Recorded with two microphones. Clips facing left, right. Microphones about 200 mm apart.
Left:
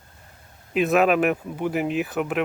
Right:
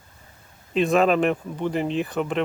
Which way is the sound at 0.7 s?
5° left (ahead or behind).